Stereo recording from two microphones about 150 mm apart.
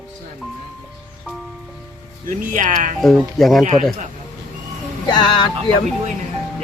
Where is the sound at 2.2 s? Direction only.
55° right (ahead or behind).